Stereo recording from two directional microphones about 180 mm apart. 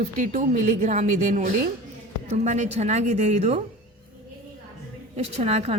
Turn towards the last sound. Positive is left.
turn(degrees=-35)  # may be behind; listen again after turning